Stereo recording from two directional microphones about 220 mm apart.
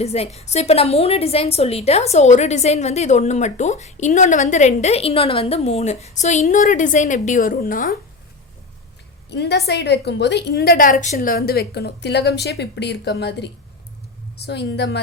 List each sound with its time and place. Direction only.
0.0 s a woman's voice: 30° left (ahead or behind)
9.3 s a woman's voice: 50° left (ahead or behind)